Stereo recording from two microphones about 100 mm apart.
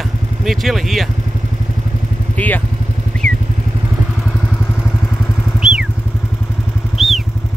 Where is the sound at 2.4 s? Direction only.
15° left (ahead or behind).